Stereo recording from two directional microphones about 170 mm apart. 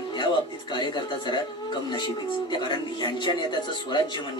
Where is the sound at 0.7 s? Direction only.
25° left (ahead or behind).